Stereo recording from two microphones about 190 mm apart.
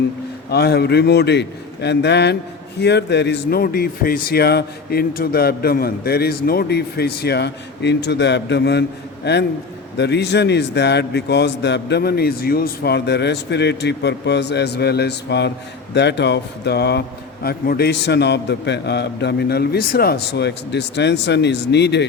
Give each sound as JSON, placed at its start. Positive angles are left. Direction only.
{"t": 0.5, "sound": "speech", "side_deg": 60}